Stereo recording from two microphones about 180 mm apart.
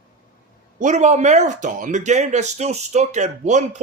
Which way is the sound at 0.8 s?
40° right (ahead or behind).